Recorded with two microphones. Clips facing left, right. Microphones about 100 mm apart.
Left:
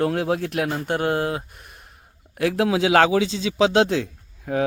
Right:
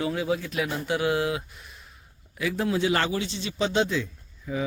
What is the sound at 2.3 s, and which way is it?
Speech, 60° left (ahead or behind).